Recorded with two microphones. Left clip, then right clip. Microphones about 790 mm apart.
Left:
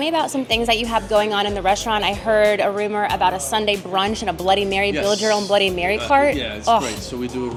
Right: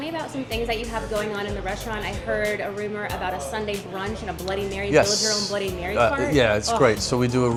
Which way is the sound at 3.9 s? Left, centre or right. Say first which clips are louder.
Left 9 dB; left.